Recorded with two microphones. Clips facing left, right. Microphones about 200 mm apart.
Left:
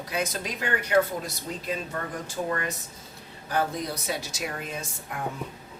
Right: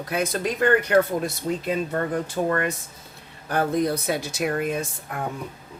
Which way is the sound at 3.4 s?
55° right (ahead or behind).